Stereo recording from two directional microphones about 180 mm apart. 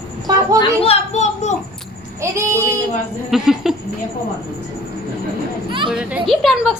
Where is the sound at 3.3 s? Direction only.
Centre (ahead or behind).